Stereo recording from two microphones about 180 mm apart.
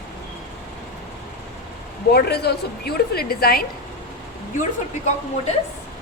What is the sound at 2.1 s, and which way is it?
A woman's voice, 65° left (ahead or behind).